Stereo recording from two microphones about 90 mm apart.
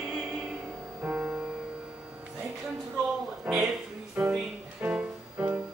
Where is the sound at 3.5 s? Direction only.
Centre (ahead or behind).